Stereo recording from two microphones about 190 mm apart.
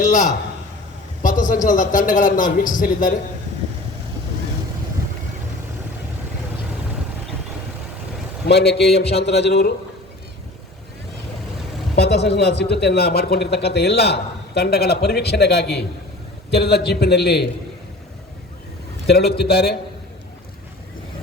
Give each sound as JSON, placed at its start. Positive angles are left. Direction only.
{"t": 0.0, "sound": "a man's voice", "side_deg": 40}
{"t": 8.4, "sound": "speech", "side_deg": 60}
{"t": 11.9, "sound": "speech", "side_deg": 60}
{"t": 19.0, "sound": "speech", "side_deg": 60}